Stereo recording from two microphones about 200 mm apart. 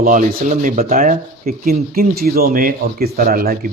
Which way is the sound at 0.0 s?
40° right (ahead or behind).